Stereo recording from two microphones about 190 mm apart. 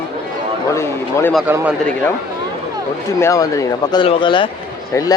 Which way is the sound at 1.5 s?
10° right (ahead or behind).